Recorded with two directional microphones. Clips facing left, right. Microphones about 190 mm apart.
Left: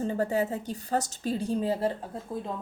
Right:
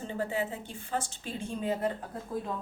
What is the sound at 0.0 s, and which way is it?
A woman's voice, 40° left (ahead or behind).